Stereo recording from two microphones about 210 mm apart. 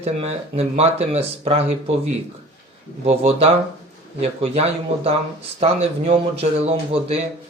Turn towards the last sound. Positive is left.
turn(degrees=-30)  # may be behind; listen again after turning